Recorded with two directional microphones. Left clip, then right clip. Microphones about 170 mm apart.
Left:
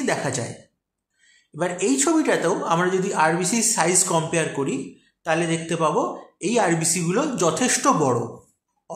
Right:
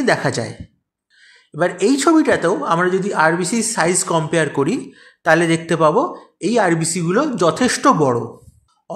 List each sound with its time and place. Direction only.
0.0 s speech: 40° right (ahead or behind)